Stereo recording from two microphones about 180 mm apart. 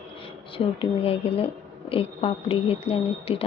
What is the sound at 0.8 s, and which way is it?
Speech, 30° left (ahead or behind).